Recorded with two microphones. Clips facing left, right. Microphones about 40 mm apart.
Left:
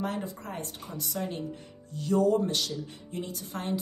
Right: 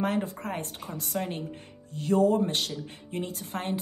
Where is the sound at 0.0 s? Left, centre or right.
Right.